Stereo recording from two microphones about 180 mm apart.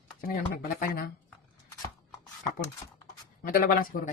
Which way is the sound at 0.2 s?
55° left (ahead or behind).